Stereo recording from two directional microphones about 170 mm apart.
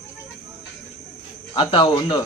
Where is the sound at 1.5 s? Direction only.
25° left (ahead or behind).